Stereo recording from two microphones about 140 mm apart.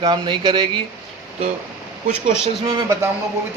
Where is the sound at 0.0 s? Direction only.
35° right (ahead or behind).